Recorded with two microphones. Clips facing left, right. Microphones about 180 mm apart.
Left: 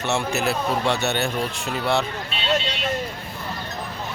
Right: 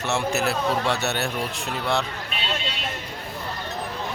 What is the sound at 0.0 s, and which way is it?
Speech, centre (ahead or behind).